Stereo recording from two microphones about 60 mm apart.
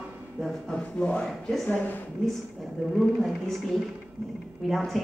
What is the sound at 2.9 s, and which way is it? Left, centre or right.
A man's voice, centre.